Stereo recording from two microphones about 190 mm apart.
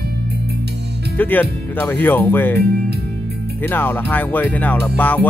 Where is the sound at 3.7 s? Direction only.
10° left (ahead or behind).